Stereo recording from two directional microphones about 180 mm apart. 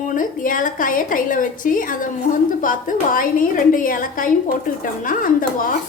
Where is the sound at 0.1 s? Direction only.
50° left (ahead or behind).